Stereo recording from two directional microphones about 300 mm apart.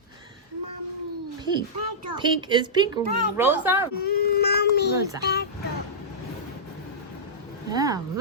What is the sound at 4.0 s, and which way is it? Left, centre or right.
Baby cry, left.